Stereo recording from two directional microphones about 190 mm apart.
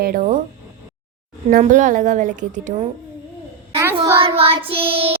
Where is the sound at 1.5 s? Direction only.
40° right (ahead or behind).